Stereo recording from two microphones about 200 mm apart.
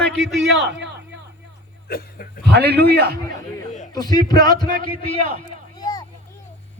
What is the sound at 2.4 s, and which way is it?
Speech, 55° right (ahead or behind).